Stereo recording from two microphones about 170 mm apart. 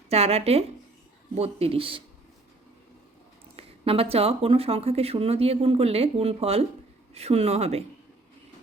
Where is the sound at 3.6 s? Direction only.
35° right (ahead or behind).